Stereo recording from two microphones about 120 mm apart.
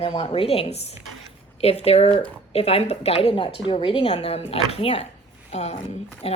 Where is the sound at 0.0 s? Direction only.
45° left (ahead or behind).